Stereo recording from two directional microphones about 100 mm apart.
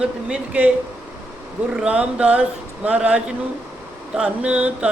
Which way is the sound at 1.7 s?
10° right (ahead or behind).